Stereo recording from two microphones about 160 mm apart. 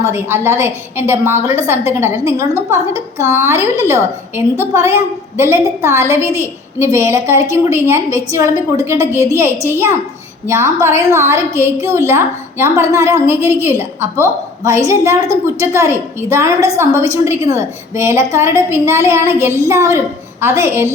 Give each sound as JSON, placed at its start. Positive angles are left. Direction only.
{"t": 0.0, "sound": "a woman's voice", "side_deg": -15}